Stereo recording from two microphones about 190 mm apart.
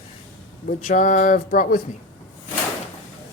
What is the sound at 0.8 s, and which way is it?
Speech, 45° left (ahead or behind).